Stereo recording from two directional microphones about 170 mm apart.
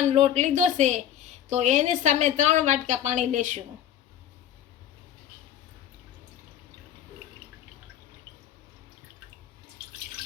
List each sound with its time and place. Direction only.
0.1 s speech: 40° right (ahead or behind)